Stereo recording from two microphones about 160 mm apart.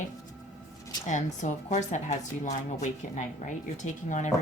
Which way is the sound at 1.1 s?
50° left (ahead or behind).